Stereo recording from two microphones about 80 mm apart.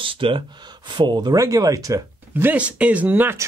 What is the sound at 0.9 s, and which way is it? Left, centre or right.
Speech, right.